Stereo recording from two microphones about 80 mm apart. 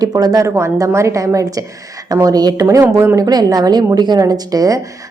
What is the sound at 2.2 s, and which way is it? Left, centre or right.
A woman's voice, right.